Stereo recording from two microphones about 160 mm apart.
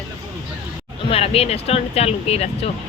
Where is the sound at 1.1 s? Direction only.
35° left (ahead or behind).